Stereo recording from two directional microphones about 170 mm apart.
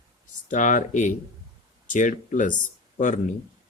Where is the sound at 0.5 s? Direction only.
50° left (ahead or behind).